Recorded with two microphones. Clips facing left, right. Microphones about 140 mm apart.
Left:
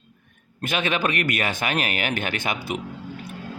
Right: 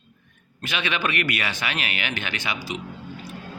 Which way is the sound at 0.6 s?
45° left (ahead or behind).